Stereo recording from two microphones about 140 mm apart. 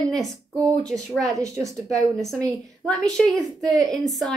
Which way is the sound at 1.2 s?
25° right (ahead or behind).